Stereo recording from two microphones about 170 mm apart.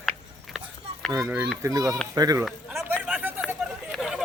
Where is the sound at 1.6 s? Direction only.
20° right (ahead or behind).